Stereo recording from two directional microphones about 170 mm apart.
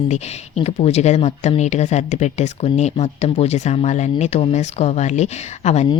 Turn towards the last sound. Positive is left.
turn(degrees=40)  # may be behind; listen again after turning